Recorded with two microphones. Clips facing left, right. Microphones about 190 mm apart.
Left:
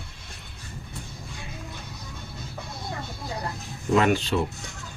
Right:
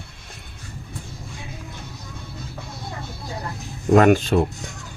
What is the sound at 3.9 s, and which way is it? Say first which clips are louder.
Speech: right 7 dB; 50° right (ahead or behind).